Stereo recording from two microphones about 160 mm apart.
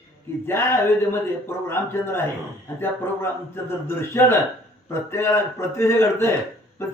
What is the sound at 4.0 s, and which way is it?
A man's voice, 15° left (ahead or behind).